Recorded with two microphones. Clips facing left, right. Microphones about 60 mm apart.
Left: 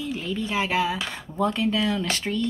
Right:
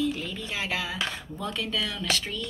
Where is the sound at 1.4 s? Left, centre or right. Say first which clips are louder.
Left 8 dB; left.